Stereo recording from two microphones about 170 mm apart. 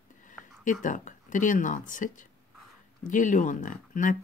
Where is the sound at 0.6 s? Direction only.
50° left (ahead or behind).